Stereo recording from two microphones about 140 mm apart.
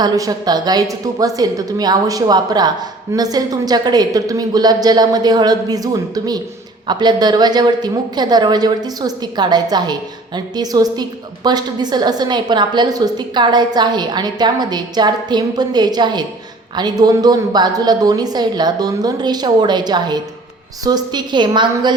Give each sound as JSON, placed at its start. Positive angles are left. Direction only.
{"t": 0.0, "sound": "a woman's voice", "side_deg": -30}